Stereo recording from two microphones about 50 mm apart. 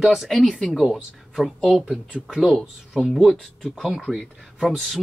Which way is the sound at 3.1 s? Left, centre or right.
Centre.